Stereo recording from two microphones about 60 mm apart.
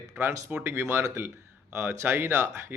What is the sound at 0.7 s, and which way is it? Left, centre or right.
Speech, right.